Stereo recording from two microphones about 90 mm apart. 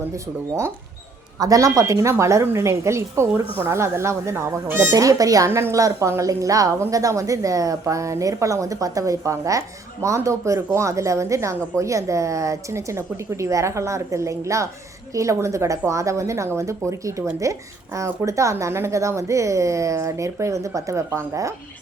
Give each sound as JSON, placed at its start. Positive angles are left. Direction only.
{"t": 1.4, "sound": "a woman's voice", "side_deg": -40}
{"t": 5.5, "sound": "a woman's voice", "side_deg": -25}
{"t": 5.7, "sound": "a woman's voice", "side_deg": -35}